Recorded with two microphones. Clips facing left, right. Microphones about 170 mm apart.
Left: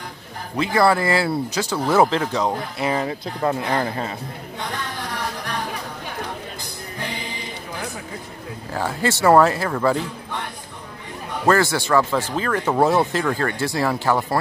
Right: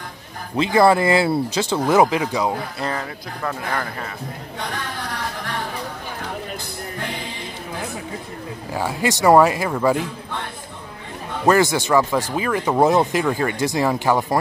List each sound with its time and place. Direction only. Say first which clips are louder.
0.6 s speech: right 3 dB; 20° right (ahead or behind)
2.0 s speech: even; 10° right (ahead or behind)
2.8 s speech: left 6 dB; 15° left (ahead or behind)
3.1 s speech: left 5 dB; 25° left (ahead or behind)
4.6 s music: even; 20° left (ahead or behind)
8.7 s speech: right 1 dB; 10° right (ahead or behind)
11.4 s speech: right 2 dB; 15° right (ahead or behind)